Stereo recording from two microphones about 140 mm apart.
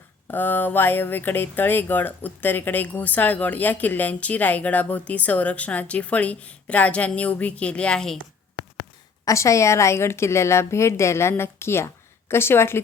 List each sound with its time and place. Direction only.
0.3 s speech: 15° left (ahead or behind)
9.2 s a woman's voice: 20° left (ahead or behind)